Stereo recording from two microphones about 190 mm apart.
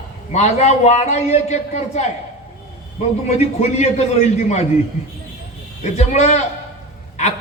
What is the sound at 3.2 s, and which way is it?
A man's voice, 35° left (ahead or behind).